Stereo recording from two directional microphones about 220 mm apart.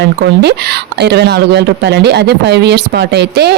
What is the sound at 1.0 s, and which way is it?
Speech, 50° right (ahead or behind).